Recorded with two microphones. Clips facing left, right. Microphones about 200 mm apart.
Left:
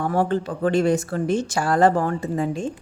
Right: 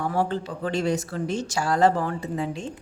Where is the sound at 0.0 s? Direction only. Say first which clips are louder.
Left 4 dB; 55° left (ahead or behind).